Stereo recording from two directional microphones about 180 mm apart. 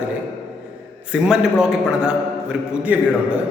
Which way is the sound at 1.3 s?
5° right (ahead or behind).